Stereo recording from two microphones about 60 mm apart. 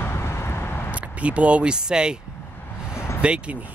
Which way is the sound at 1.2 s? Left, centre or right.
Right.